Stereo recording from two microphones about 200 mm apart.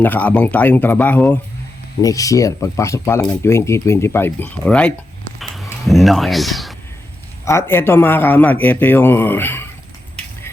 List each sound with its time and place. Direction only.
0.0 s a man's voice: 10° left (ahead or behind)
7.4 s a man's voice: 15° left (ahead or behind)